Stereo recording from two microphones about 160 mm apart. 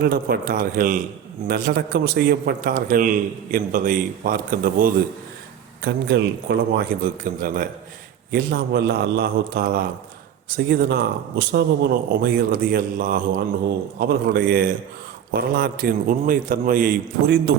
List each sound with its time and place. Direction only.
0.0 s a man's voice: 70° right (ahead or behind)
1.5 s a man's voice: 75° right (ahead or behind)
5.8 s a man's voice: 90° right
7.0 s a man's voice: 60° right (ahead or behind)
10.7 s a man's voice: 85° right; by 17.5 s 65° right (ahead or behind)